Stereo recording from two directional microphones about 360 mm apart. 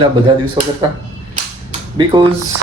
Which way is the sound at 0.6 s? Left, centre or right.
Centre.